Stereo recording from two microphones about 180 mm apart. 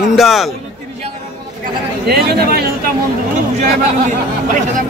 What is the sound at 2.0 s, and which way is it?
Speech, 60° right (ahead or behind).